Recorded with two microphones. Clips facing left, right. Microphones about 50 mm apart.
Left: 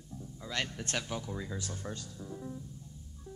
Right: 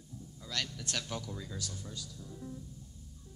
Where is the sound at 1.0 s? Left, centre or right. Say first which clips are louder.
Left 2 dB; left.